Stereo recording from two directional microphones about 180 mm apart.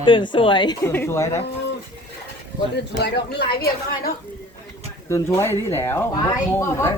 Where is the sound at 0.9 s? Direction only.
10° left (ahead or behind).